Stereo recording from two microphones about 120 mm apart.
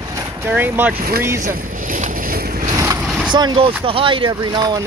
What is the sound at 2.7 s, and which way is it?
Vehicle, 30° right (ahead or behind).